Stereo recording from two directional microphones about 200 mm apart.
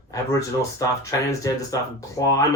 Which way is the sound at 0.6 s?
15° left (ahead or behind).